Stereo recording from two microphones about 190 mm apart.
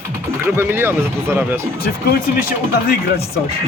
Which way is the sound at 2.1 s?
50° left (ahead or behind).